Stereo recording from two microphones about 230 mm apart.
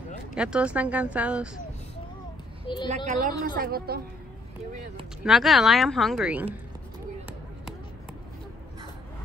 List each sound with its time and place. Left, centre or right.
0.3 s speech: centre
2.6 s speech: left
3.1 s a woman's voice: right
5.2 s speech: centre